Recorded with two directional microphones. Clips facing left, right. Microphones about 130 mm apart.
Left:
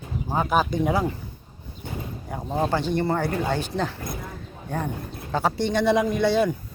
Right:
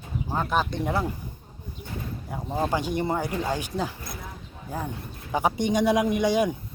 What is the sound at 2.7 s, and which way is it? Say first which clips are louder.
Speech: left 3 dB; 10° right (ahead or behind).